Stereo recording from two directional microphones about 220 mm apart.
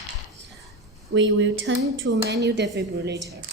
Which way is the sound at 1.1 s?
55° right (ahead or behind).